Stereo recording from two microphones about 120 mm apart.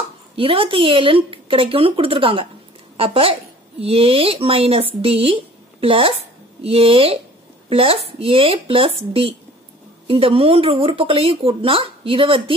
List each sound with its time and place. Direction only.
0.4 s speech: 50° right (ahead or behind)